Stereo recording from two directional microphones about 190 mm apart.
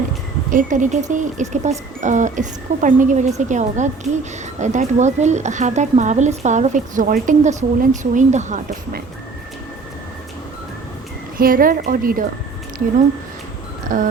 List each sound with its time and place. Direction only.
0.5 s speech: 40° right (ahead or behind)
11.3 s a woman's voice: 50° right (ahead or behind)
13.8 s music: 45° right (ahead or behind)